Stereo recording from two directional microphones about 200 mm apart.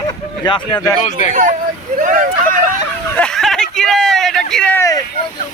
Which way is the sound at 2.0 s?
40° right (ahead or behind).